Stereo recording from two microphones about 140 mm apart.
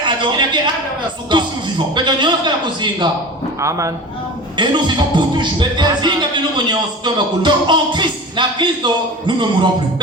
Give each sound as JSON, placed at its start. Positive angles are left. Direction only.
{"t": 0.0, "sound": "a man's voice", "side_deg": -35}
{"t": 1.3, "sound": "music", "side_deg": -35}
{"t": 3.6, "sound": "a man's voice", "side_deg": -20}
{"t": 4.5, "sound": "music", "side_deg": -35}